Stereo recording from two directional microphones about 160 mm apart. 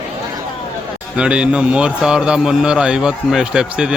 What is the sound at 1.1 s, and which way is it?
A man's voice, 5° right (ahead or behind).